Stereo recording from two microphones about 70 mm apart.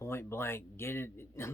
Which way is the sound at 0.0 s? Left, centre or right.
Left.